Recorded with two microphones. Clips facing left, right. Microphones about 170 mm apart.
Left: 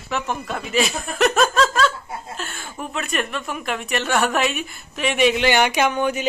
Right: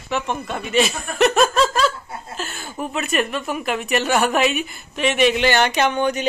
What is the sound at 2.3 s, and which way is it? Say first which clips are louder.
Chuckle: right 2 dB; 5° right (ahead or behind).